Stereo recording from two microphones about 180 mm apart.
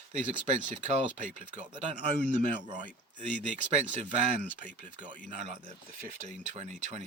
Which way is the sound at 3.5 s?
40° right (ahead or behind).